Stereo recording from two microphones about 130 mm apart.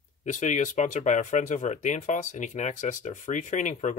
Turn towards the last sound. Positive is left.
turn(degrees=70)  # may be behind; listen again after turning